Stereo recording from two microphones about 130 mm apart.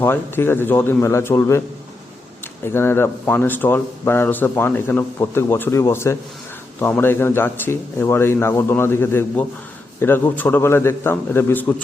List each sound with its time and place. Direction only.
0.0 s a man's voice: 15° left (ahead or behind)
2.6 s a man's voice: 20° left (ahead or behind)